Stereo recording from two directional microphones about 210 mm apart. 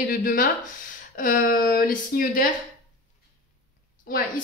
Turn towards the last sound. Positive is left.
turn(degrees=45)  # may be behind; listen again after turning